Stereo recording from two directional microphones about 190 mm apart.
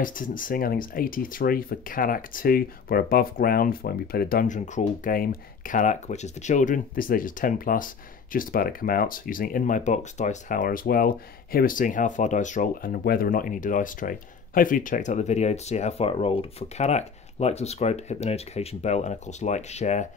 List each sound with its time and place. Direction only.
0.0 s speech: 45° left (ahead or behind)